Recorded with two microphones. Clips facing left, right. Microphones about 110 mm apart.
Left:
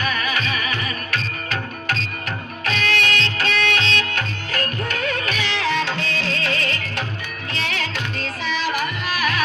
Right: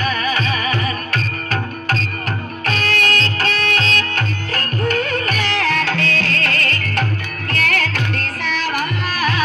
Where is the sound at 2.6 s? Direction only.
40° right (ahead or behind).